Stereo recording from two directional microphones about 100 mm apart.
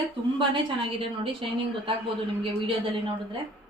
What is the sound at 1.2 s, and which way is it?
Speech, 60° right (ahead or behind).